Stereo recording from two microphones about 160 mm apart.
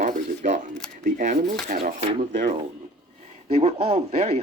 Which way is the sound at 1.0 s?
50° right (ahead or behind).